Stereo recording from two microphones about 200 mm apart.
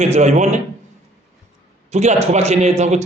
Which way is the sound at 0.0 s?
35° right (ahead or behind).